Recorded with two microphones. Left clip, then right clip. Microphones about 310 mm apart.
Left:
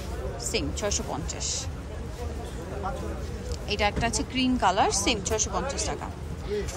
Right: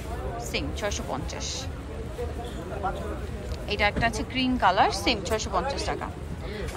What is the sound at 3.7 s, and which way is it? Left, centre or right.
A woman's voice, centre.